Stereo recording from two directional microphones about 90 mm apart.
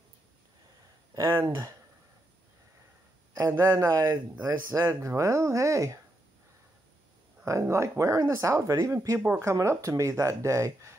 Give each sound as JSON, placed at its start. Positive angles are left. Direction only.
{"t": 1.1, "sound": "speech", "side_deg": -30}
{"t": 3.3, "sound": "speech", "side_deg": -35}
{"t": 7.4, "sound": "speech", "side_deg": -35}